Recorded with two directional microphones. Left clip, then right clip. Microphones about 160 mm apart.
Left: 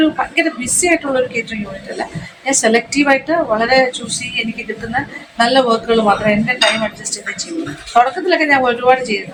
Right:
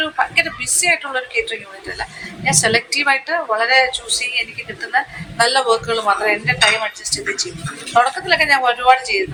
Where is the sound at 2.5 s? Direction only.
20° right (ahead or behind).